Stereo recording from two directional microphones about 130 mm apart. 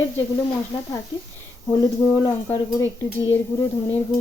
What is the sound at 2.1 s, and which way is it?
Speech, 20° left (ahead or behind).